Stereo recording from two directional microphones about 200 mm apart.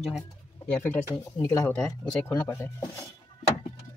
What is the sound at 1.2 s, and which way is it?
Speech, 15° left (ahead or behind).